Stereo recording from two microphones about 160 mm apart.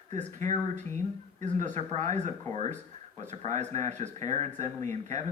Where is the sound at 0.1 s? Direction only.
50° right (ahead or behind).